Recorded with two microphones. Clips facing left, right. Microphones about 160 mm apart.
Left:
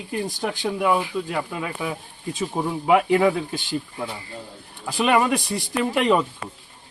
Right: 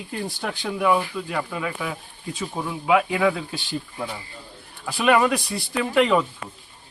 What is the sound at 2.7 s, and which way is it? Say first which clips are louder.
Speech: left 3 dB; 40° left (ahead or behind).